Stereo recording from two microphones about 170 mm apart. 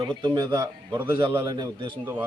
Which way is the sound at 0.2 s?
30° right (ahead or behind).